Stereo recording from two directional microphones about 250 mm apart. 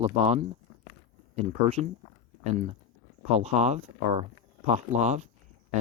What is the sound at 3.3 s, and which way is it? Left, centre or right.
Speech, right.